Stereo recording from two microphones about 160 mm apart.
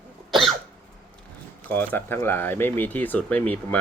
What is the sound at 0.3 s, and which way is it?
Cough, centre (ahead or behind).